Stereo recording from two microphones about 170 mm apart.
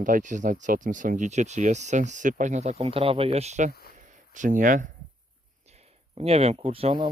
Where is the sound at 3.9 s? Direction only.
50° right (ahead or behind).